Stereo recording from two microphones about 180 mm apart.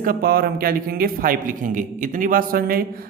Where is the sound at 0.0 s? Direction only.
55° right (ahead or behind).